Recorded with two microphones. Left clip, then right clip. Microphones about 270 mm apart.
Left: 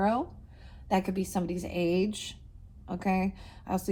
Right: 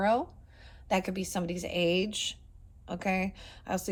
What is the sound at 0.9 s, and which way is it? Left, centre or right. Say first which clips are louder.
A woman's voice: left 2 dB; right.